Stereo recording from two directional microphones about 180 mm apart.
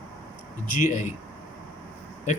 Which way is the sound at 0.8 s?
45° left (ahead or behind).